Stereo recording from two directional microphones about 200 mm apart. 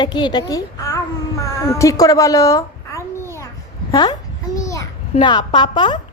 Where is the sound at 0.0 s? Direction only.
20° left (ahead or behind).